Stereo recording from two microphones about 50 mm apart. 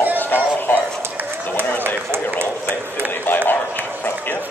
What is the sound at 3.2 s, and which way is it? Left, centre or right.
Run, left.